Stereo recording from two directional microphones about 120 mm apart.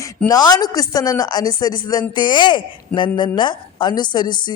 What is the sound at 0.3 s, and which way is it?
A woman's voice, 35° left (ahead or behind).